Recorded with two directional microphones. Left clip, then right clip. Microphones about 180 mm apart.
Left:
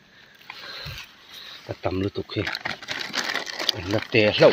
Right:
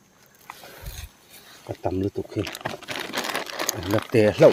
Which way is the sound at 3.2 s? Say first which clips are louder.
Left 1 dB; 10° right (ahead or behind).